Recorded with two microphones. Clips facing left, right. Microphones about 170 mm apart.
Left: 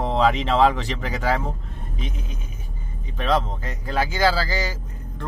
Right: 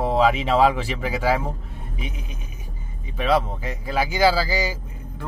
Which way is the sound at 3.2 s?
10° right (ahead or behind).